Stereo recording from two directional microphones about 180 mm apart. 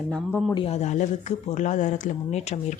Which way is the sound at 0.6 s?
35° left (ahead or behind).